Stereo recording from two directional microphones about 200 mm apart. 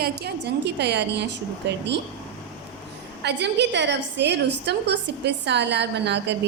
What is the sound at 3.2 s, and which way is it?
A woman's voice, 60° right (ahead or behind).